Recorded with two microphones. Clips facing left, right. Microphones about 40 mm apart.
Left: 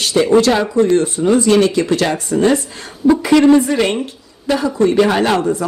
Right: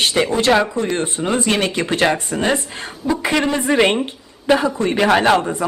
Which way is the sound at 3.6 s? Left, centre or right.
Right.